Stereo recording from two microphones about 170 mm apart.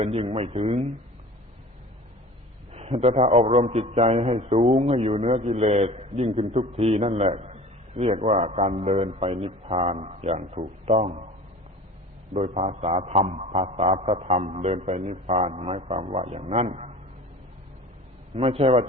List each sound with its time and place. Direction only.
0.0 s a man's voice: 35° right (ahead or behind)
2.7 s a man's voice: 40° right (ahead or behind)
12.3 s a man's voice: 40° right (ahead or behind)
18.3 s a man's voice: 35° right (ahead or behind)